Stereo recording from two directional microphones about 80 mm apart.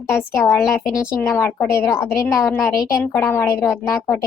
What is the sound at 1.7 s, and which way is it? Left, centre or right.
A woman's voice, left.